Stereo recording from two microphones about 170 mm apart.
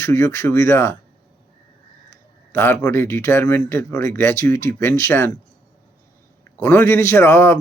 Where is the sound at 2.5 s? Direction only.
15° left (ahead or behind).